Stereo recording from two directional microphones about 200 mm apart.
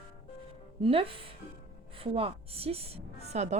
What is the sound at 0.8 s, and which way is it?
A woman's voice, 25° right (ahead or behind).